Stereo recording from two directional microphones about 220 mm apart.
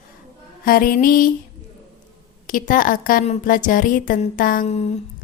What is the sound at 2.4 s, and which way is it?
A woman's voice, 40° left (ahead or behind).